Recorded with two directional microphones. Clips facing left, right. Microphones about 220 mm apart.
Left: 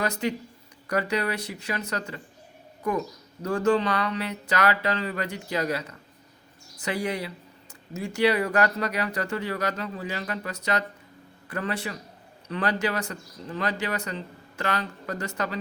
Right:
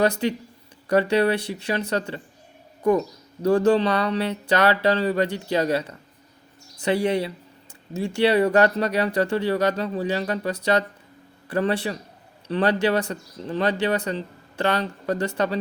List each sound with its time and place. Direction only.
0.0 s speech: 30° right (ahead or behind)
3.4 s speech: 30° right (ahead or behind)